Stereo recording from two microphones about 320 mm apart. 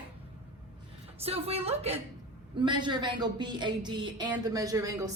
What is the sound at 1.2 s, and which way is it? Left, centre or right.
A woman's voice, centre.